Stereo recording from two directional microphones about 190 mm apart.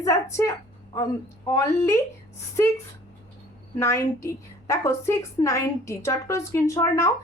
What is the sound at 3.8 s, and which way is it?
A woman's voice, 15° left (ahead or behind).